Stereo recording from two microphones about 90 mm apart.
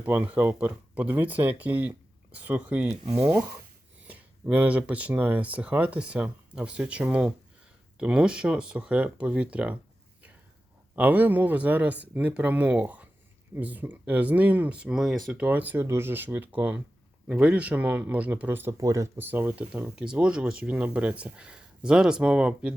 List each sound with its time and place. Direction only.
0.0 s speech: 20° right (ahead or behind)
4.0 s speech: 15° right (ahead or behind)
10.9 s speech: 20° right (ahead or behind)
18.8 s speech: 35° right (ahead or behind)
19.1 s speech: 20° right (ahead or behind)